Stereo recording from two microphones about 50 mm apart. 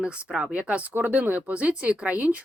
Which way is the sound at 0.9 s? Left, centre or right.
Right.